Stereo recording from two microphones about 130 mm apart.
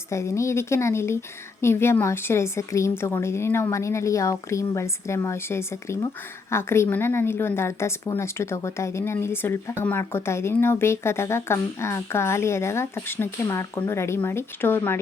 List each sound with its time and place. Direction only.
0.1 s speech: 20° left (ahead or behind)